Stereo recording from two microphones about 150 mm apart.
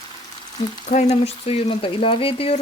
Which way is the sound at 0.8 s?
50° left (ahead or behind).